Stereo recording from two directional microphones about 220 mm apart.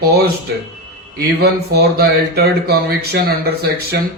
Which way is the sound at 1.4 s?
45° right (ahead or behind).